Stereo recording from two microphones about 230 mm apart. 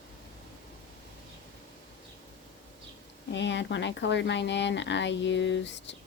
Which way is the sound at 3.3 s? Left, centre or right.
Left.